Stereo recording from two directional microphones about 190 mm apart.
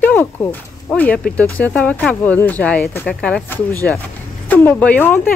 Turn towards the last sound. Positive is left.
turn(degrees=10)  # may be behind; listen again after turning